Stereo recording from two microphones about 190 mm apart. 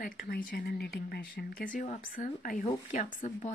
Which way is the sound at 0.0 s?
45° left (ahead or behind).